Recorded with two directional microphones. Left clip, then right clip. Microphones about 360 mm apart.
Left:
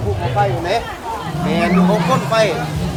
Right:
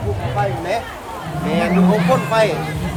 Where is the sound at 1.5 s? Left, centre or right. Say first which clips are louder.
Left 1 dB; centre.